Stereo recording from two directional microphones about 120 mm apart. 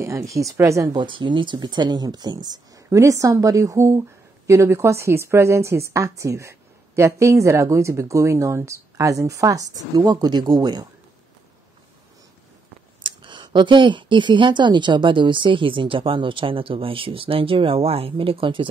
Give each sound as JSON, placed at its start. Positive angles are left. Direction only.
{"t": 0.0, "sound": "speech", "side_deg": -25}
{"t": 0.9, "sound": "speech", "side_deg": -45}
{"t": 13.0, "sound": "speech", "side_deg": -40}